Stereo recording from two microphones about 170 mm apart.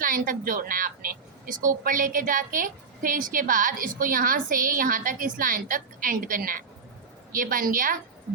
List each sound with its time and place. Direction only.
0.0 s a woman's voice: 55° right (ahead or behind)